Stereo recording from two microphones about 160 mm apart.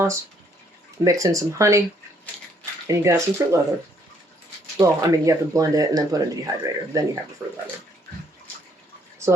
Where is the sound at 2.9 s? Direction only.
20° right (ahead or behind).